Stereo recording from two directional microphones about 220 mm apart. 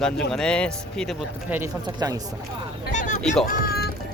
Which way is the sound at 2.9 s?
35° left (ahead or behind).